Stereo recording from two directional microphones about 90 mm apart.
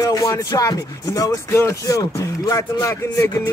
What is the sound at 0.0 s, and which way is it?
Speech, 40° left (ahead or behind).